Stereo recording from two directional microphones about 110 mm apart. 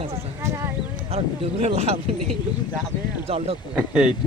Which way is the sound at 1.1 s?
65° right (ahead or behind).